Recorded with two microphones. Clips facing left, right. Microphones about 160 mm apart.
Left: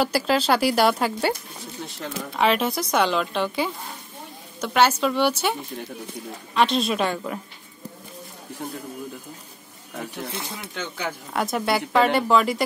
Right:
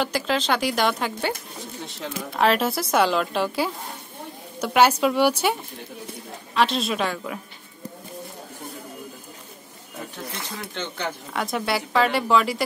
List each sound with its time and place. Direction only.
0.0 s a woman's voice: 5° left (ahead or behind)
10.7 s speech: 5° left (ahead or behind)